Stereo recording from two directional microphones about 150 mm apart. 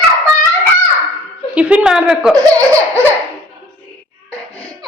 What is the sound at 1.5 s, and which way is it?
Speech, 10° right (ahead or behind).